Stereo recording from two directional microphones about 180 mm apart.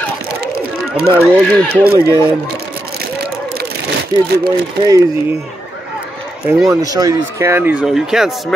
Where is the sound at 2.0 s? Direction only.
15° left (ahead or behind).